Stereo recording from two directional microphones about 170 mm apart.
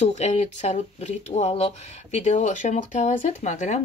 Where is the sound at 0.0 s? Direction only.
40° left (ahead or behind).